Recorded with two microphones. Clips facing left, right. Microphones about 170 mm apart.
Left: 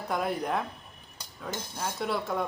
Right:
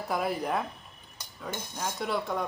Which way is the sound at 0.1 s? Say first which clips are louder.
Even; centre (ahead or behind).